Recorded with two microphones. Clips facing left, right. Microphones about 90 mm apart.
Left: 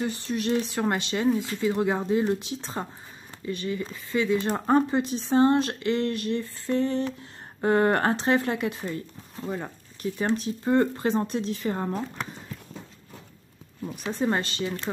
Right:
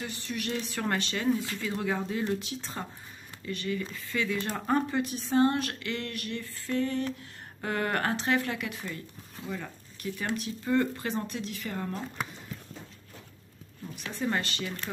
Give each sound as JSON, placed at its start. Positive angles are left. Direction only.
{"t": 0.0, "sound": "speech", "side_deg": 30}
{"t": 14.1, "sound": "speech", "side_deg": 30}